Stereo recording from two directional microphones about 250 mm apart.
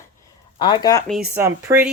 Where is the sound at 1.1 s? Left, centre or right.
Centre.